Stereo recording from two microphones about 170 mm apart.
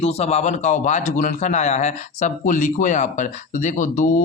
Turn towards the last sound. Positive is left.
turn(degrees=45)  # may be behind; listen again after turning